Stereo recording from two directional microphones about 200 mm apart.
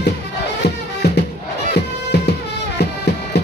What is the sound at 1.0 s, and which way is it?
Crowd, 55° left (ahead or behind).